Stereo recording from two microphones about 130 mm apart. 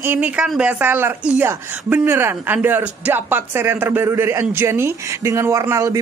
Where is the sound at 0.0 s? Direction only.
15° right (ahead or behind).